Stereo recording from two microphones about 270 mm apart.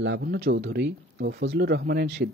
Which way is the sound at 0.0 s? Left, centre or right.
Right.